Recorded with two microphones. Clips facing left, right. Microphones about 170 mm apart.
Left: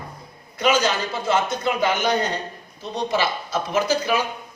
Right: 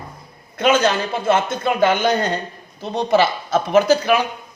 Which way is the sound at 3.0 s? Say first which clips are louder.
Right 7 dB; 60° right (ahead or behind).